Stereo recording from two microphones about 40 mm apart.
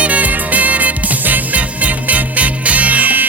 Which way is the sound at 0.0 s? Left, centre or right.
Right.